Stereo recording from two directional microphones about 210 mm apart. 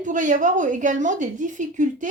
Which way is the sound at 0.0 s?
35° right (ahead or behind).